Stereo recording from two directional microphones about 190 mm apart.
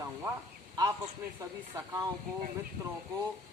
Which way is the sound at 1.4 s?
15° right (ahead or behind).